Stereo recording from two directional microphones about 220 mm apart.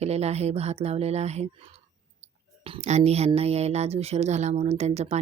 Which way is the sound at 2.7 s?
30° right (ahead or behind).